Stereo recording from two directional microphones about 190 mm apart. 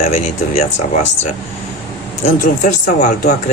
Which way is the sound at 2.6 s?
40° left (ahead or behind).